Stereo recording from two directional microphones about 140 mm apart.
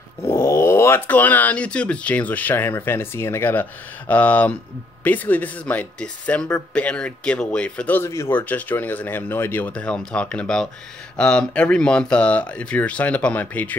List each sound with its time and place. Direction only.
0.3 s speech: 20° left (ahead or behind)